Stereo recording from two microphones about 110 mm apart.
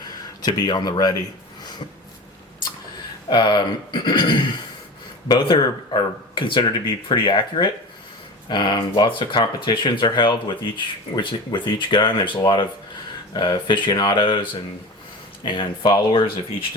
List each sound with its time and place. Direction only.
0.4 s speech: 40° left (ahead or behind)
3.2 s speech: 45° left (ahead or behind)
15.4 s speech: 45° left (ahead or behind)